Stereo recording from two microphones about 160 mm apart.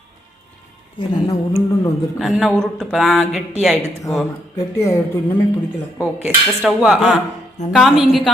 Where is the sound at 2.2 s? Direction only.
5° right (ahead or behind).